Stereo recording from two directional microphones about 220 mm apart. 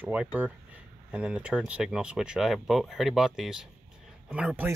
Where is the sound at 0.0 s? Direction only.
5° right (ahead or behind).